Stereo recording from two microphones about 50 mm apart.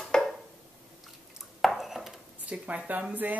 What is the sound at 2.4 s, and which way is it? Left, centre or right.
Speech, right.